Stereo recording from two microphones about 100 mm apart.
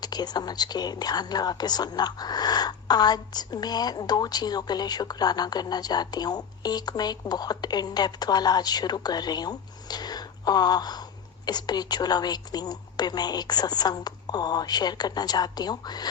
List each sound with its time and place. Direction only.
0.0 s speech: 45° left (ahead or behind)